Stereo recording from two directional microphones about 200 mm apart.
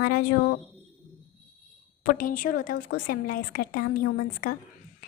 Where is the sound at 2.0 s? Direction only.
45° left (ahead or behind).